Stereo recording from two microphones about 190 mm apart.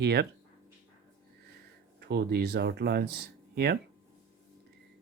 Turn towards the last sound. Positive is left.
turn(degrees=-55)  # may be behind; listen again after turning